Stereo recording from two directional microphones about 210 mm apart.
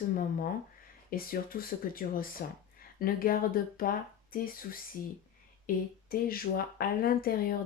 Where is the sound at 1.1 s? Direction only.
45° left (ahead or behind).